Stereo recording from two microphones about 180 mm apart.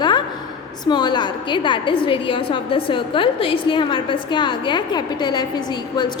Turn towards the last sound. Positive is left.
turn(degrees=25)  # may be behind; listen again after turning